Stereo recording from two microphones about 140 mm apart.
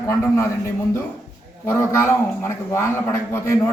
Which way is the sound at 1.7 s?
15° left (ahead or behind).